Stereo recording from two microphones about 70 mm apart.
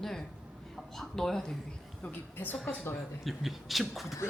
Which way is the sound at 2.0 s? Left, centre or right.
Left.